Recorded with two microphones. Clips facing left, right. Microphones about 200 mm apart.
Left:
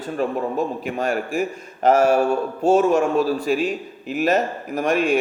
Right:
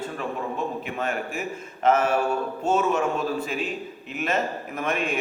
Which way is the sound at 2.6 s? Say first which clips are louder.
Left 7 dB; 40° left (ahead or behind).